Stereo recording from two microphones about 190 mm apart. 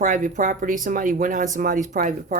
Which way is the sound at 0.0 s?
45° right (ahead or behind).